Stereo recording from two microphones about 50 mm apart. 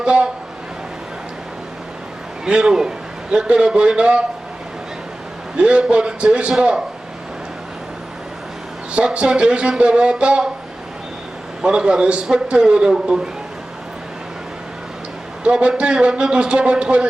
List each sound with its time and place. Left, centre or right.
0.0 s speech: right
2.4 s a man's voice: centre
5.5 s speech: right
8.9 s speech: right
11.6 s a man's voice: centre
15.4 s speech: centre